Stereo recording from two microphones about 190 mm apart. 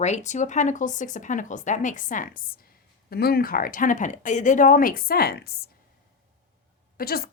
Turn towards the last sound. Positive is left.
turn(degrees=50)  # may be behind; listen again after turning